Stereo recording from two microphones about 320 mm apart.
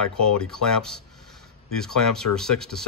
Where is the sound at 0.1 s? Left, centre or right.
Centre.